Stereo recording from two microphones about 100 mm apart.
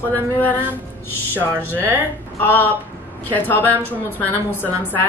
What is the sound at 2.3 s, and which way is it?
Speech, 20° left (ahead or behind).